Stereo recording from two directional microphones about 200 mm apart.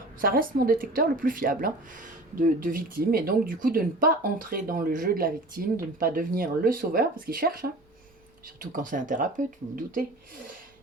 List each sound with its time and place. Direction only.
0.2 s speech: 45° right (ahead or behind)